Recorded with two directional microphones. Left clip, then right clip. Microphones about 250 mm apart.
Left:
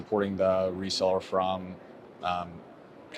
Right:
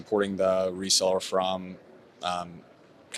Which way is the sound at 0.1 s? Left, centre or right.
Right.